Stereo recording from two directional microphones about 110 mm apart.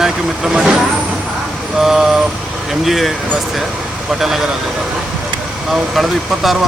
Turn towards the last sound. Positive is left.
turn(degrees=0)  # may be behind; listen again after turning